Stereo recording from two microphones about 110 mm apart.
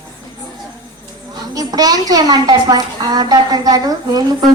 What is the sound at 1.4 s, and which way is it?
A woman's voice, 35° right (ahead or behind).